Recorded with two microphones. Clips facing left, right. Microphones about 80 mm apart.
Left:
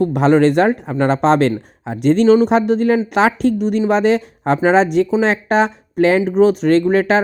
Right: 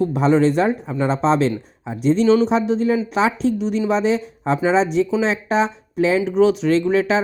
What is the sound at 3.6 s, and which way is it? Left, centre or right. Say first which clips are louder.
Speech: left 4 dB; left.